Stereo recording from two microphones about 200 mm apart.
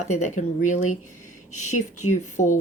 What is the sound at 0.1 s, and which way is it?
Speech, 35° left (ahead or behind).